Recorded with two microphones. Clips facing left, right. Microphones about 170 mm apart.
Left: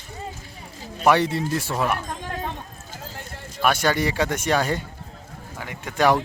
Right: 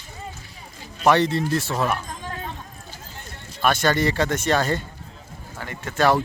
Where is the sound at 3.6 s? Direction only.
10° left (ahead or behind).